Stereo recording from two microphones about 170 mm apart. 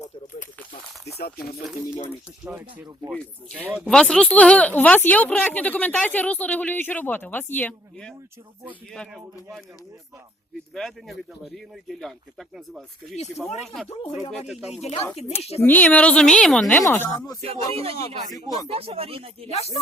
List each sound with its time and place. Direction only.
1.2 s speech: 65° left (ahead or behind)
2.4 s speech: 5° right (ahead or behind)
3.8 s speech: 5° left (ahead or behind)
10.8 s speech: centre (ahead or behind)
14.0 s speech: 35° left (ahead or behind)
14.3 s speech: centre (ahead or behind)
15.4 s speech: 40° left (ahead or behind)
15.6 s speech: 10° left (ahead or behind)
17.5 s speech: 35° right (ahead or behind)
18.3 s speech: 20° left (ahead or behind)
18.7 s speech: 35° right (ahead or behind)
19.5 s speech: 40° left (ahead or behind)